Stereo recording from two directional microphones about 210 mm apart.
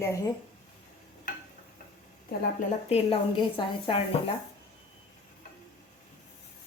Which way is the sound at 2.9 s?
25° left (ahead or behind).